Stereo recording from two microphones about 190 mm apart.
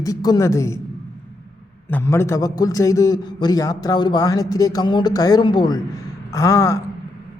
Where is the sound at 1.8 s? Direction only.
10° left (ahead or behind).